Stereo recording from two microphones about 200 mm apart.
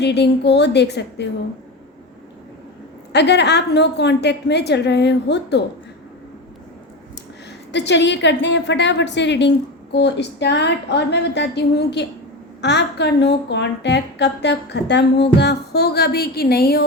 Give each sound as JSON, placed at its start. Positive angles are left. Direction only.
{"t": 0.0, "sound": "a woman's voice", "side_deg": 60}
{"t": 3.1, "sound": "a woman's voice", "side_deg": 60}
{"t": 7.7, "sound": "a woman's voice", "side_deg": 60}